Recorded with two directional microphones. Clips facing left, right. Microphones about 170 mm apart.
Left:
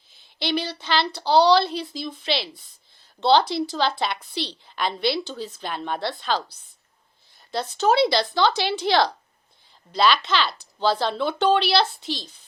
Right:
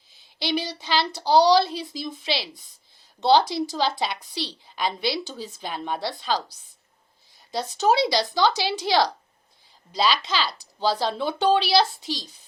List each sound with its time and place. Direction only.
0.3 s a woman's voice: 15° right (ahead or behind)
7.5 s a woman's voice: 15° right (ahead or behind)
12.0 s a child's voice: 15° left (ahead or behind)